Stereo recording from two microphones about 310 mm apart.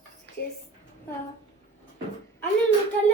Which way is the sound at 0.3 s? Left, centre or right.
Right.